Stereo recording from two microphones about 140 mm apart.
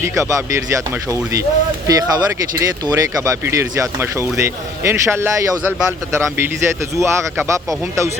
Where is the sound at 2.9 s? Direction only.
30° right (ahead or behind).